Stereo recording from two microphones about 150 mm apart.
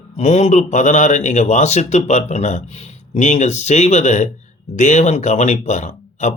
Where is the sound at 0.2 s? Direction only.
45° left (ahead or behind).